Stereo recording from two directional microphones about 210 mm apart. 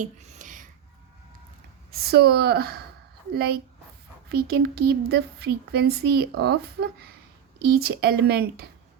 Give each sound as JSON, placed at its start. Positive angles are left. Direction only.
{"t": 0.0, "sound": "a sound", "side_deg": -35}
{"t": 1.9, "sound": "speech", "side_deg": -50}
{"t": 4.3, "sound": "speech", "side_deg": -50}